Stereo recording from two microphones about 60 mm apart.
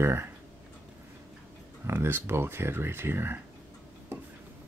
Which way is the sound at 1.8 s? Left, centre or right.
Right.